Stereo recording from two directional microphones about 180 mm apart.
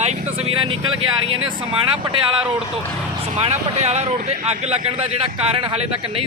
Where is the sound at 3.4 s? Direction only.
35° right (ahead or behind).